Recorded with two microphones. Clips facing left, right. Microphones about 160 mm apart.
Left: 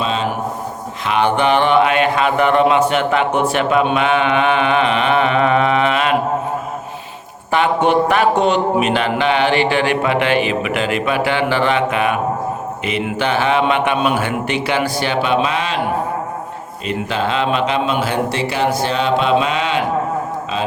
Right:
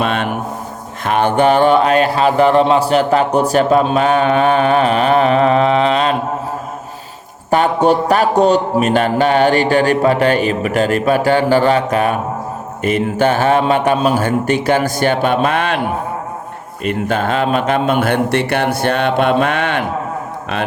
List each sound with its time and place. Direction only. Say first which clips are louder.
0.0 s a sound: right 2 dB; 60° right (ahead or behind)
1.0 s speech: right 3 dB; 50° right (ahead or behind)
7.5 s a man's voice: right 2 dB; 40° right (ahead or behind); by 15.8 s 55° right (ahead or behind)
16.8 s speech: right 3 dB; 50° right (ahead or behind)